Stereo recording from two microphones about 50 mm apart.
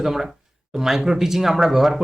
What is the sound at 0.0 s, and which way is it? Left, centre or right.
Speech, centre.